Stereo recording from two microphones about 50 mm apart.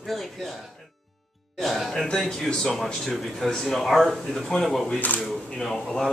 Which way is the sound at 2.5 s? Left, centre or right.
Centre.